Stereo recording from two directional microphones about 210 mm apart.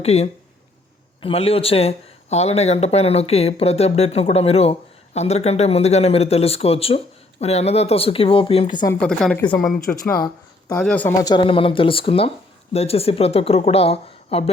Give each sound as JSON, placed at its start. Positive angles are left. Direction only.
{"t": 0.0, "sound": "speech", "side_deg": 30}
{"t": 9.0, "sound": "a woman's voice", "side_deg": 5}
{"t": 10.8, "sound": "speech", "side_deg": 5}